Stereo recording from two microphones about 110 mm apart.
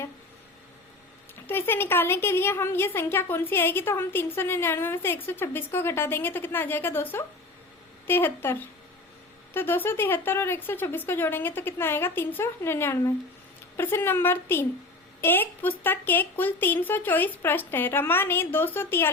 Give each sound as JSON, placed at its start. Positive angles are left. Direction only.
{"t": 1.5, "sound": "a woman's voice", "side_deg": 20}